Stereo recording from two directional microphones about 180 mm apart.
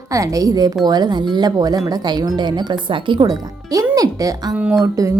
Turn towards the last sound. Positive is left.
turn(degrees=-20)  # may be behind; listen again after turning